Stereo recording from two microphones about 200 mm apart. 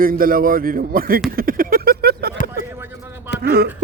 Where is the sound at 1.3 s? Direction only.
45° right (ahead or behind).